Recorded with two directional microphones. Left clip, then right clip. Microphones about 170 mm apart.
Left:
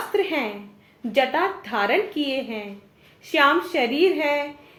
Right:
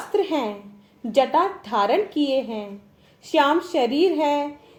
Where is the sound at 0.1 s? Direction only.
40° right (ahead or behind).